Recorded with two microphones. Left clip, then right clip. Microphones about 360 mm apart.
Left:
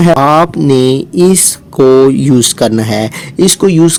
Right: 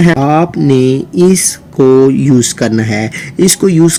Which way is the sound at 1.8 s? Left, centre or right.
Left.